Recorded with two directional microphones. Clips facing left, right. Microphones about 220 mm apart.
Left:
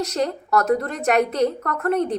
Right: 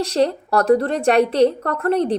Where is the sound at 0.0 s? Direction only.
30° right (ahead or behind).